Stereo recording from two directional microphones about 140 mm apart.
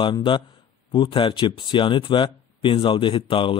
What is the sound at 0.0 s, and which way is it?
Speech, 35° left (ahead or behind).